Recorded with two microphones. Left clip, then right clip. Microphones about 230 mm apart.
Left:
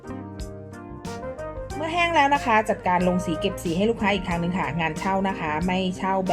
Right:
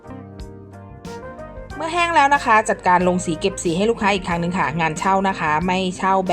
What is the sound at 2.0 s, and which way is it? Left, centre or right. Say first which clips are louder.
A woman's voice: right 5 dB; centre.